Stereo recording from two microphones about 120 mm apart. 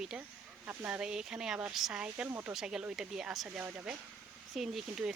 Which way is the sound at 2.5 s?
5° right (ahead or behind).